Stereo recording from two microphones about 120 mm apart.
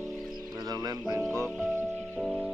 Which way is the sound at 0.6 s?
30° right (ahead or behind).